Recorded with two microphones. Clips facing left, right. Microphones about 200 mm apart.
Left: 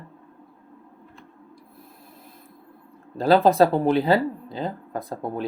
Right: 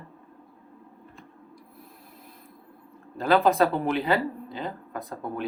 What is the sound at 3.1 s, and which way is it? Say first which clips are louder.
Speech: left 4 dB; 35° left (ahead or behind).